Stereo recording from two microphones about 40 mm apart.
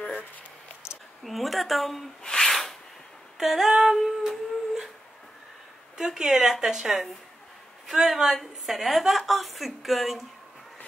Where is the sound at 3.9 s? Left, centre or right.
Centre.